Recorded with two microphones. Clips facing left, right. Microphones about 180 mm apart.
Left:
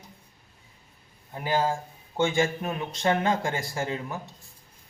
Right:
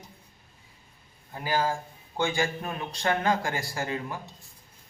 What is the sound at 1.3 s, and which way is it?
Speech, 20° left (ahead or behind).